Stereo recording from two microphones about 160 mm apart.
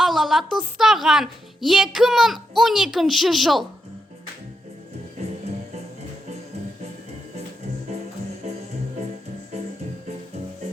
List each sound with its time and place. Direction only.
0.0 s a sound: centre (ahead or behind)
0.8 s a child's voice: centre (ahead or behind)
5.1 s music: 40° right (ahead or behind)
8.4 s music: 40° right (ahead or behind)